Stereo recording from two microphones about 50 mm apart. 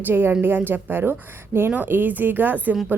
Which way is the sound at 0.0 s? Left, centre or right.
Right.